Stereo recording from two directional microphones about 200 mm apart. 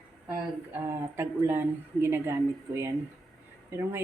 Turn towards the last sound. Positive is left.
turn(degrees=-15)  # may be behind; listen again after turning